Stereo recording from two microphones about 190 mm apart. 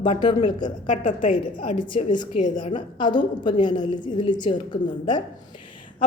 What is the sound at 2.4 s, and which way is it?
Speech, 45° left (ahead or behind).